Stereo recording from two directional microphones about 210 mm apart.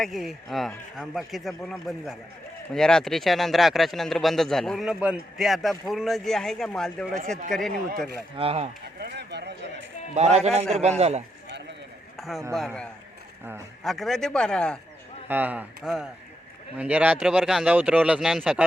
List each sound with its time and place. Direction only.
0.0 s a man's voice: centre (ahead or behind)
8.4 s speech: 30° right (ahead or behind)
9.0 s a sound: 50° right (ahead or behind)
10.2 s a man's voice: 30° right (ahead or behind)
12.1 s a sound: centre (ahead or behind)
12.5 s a man's voice: 5° left (ahead or behind)
15.3 s a man's voice: 10° right (ahead or behind)